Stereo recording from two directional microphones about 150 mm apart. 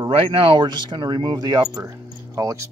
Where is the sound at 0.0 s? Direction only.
35° right (ahead or behind).